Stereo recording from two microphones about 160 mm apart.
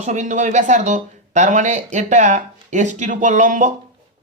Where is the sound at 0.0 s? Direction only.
45° right (ahead or behind).